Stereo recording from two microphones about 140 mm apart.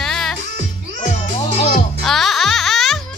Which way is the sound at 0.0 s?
5° left (ahead or behind).